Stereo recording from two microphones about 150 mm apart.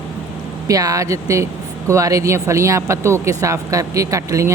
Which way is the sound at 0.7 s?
25° right (ahead or behind).